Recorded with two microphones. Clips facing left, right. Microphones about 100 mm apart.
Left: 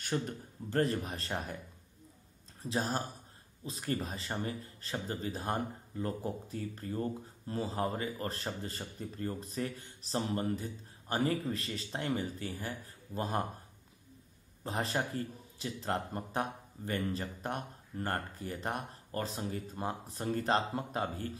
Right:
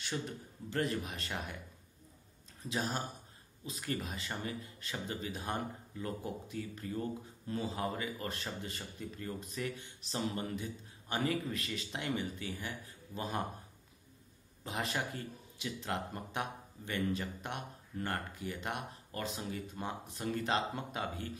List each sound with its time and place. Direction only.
0.1 s speech: 35° left (ahead or behind)
2.6 s speech: 35° left (ahead or behind)
14.6 s speech: 35° left (ahead or behind)